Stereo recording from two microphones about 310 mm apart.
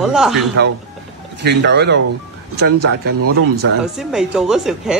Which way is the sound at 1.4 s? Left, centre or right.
Right.